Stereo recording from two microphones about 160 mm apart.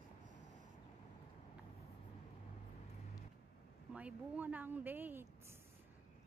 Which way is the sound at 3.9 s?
10° right (ahead or behind).